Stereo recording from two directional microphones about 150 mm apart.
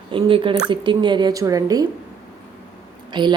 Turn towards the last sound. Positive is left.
turn(degrees=-30)  # may be behind; listen again after turning